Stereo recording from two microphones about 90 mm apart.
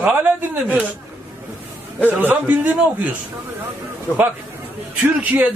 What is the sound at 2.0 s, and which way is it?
Speech, 20° right (ahead or behind).